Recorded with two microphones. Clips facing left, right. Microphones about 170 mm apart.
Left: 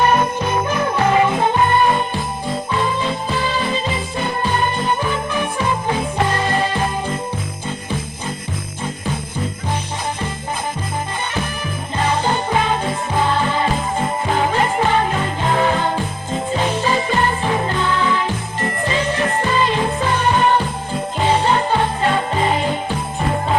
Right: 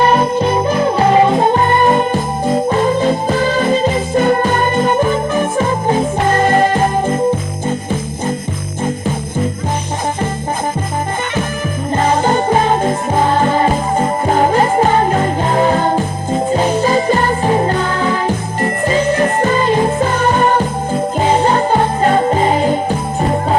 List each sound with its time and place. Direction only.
0.1 s music: 30° right (ahead or behind)
0.8 s jingle bell: 30° right (ahead or behind)
1.3 s jingle bell: 45° right (ahead or behind)
11.9 s jingle bell: 45° right (ahead or behind)
18.9 s music: 45° right (ahead or behind)